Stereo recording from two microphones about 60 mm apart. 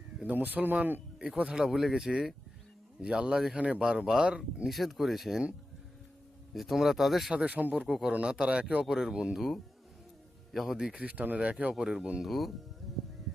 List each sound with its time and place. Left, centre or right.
0.3 s speech: right
1.2 s speech: centre
3.8 s speech: centre
4.7 s speech: centre
6.5 s speech: centre
7.3 s speech: right
7.9 s speech: centre
8.1 s speech: centre
10.8 s speech: centre
11.7 s speech: centre
12.2 s speech: centre